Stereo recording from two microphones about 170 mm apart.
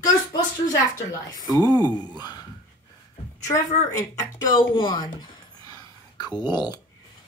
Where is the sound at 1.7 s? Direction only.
25° right (ahead or behind).